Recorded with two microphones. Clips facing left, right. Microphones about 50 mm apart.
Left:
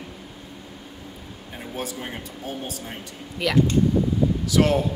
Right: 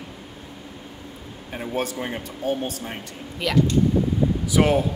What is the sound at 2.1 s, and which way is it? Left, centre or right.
Speech, right.